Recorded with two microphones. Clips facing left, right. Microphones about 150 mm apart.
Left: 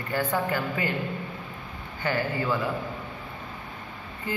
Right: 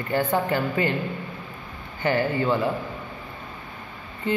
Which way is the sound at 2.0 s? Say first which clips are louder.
Right 5 dB; 25° right (ahead or behind).